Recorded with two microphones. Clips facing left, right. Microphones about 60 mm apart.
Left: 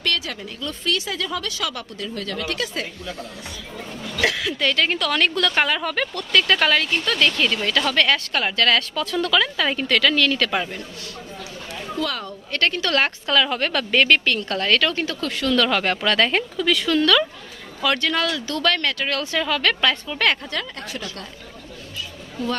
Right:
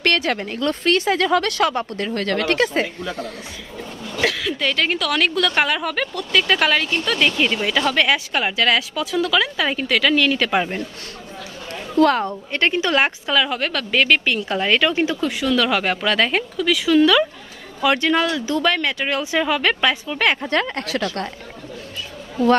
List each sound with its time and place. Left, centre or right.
0.0 s speech: right
4.2 s a woman's voice: centre
12.0 s a woman's voice: right
12.4 s speech: centre
20.8 s a woman's voice: right